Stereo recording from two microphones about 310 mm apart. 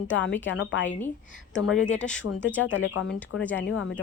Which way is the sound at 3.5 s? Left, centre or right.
Left.